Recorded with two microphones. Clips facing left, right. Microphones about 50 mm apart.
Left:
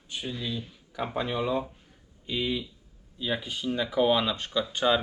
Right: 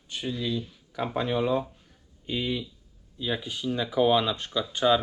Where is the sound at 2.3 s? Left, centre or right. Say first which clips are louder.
Even; centre.